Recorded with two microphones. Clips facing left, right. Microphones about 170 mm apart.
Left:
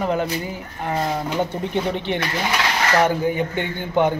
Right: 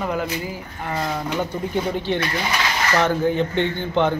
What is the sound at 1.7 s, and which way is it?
A man's voice, 20° left (ahead or behind).